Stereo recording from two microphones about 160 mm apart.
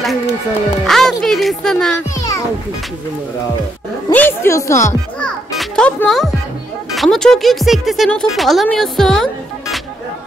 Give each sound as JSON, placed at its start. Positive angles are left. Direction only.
{"t": 0.8, "sound": "speech", "side_deg": 0}
{"t": 4.1, "sound": "speech", "side_deg": 10}
{"t": 5.2, "sound": "children playing", "side_deg": 5}
{"t": 7.0, "sound": "speech", "side_deg": 0}